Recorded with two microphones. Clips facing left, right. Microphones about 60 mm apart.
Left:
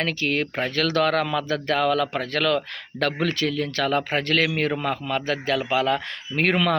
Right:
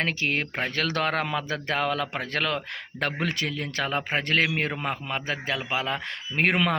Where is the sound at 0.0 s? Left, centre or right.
Right.